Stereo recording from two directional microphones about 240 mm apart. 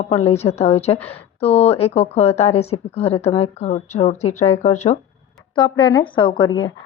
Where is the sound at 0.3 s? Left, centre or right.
Left.